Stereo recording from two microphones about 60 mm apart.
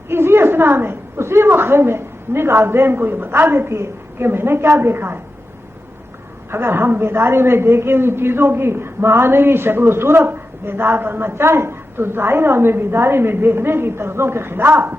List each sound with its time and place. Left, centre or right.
0.1 s a woman's voice: right
6.5 s a man's voice: right